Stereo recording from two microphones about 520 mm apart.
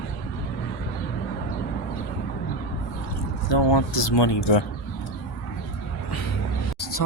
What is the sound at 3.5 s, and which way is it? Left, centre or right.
Speech, left.